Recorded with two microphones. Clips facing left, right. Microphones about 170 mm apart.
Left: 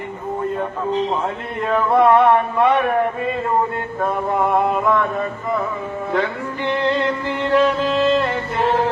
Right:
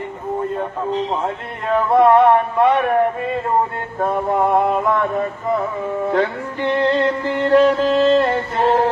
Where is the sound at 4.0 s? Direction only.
35° right (ahead or behind).